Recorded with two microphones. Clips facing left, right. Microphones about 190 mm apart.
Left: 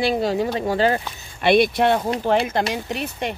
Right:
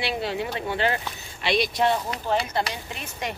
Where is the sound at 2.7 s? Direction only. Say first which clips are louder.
Left 10 dB; 75° left (ahead or behind).